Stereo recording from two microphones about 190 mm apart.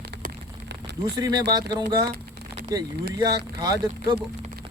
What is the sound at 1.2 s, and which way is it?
Speech, 20° right (ahead or behind).